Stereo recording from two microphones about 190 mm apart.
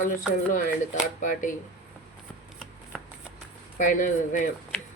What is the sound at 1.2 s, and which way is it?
Speech, 45° left (ahead or behind).